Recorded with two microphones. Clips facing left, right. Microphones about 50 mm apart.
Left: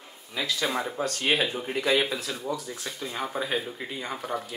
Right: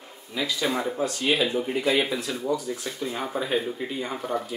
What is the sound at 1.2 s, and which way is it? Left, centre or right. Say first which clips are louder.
Speech: right 1 dB; left.